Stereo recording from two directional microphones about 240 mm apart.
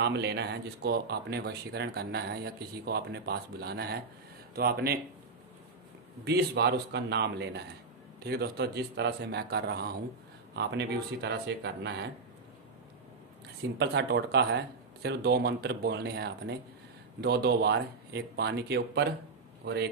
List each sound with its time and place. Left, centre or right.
0.0 s speech: right
6.2 s speech: right
13.7 s speech: right